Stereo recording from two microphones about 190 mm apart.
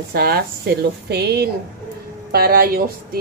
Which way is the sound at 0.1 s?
55° right (ahead or behind).